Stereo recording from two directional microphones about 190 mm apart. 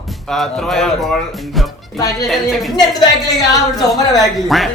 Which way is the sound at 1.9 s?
20° left (ahead or behind).